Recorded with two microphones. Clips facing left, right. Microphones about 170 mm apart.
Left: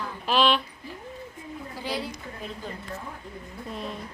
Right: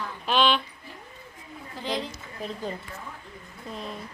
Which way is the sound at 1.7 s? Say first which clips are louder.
Right 2 dB; 10° left (ahead or behind).